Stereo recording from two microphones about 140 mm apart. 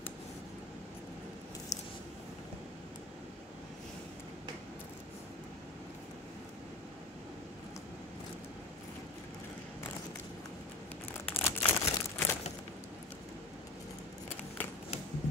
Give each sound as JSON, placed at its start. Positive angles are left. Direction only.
{"t": 11.3, "sound": "crumpling", "side_deg": 15}
{"t": 14.6, "sound": "typewriter", "side_deg": 10}